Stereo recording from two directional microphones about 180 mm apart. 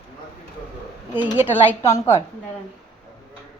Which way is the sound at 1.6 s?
15° left (ahead or behind).